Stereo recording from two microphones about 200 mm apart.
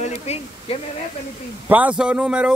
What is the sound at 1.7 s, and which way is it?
Speech, 5° right (ahead or behind).